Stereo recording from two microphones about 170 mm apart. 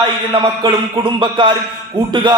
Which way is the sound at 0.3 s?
30° right (ahead or behind).